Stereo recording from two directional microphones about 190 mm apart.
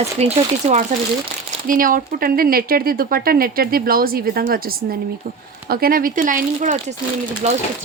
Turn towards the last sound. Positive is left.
turn(degrees=-35)  # may be behind; listen again after turning